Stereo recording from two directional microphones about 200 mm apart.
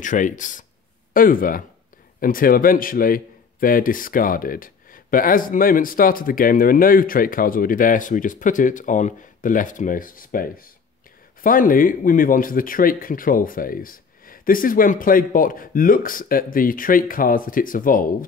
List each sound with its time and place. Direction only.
0.0 s a man's voice: 40° left (ahead or behind)